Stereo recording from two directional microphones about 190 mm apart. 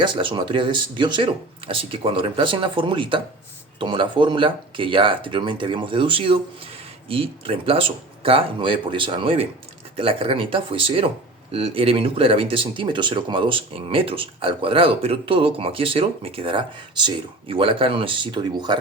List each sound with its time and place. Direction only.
0.0 s speech: 25° right (ahead or behind)